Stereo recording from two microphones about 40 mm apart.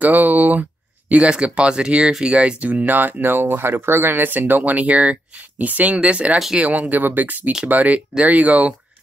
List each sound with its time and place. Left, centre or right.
0.0 s a sound: right
1.1 s speech: right
2.3 s speech: right
4.1 s speech: right